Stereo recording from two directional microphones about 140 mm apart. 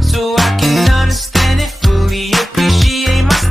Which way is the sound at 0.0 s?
Centre (ahead or behind).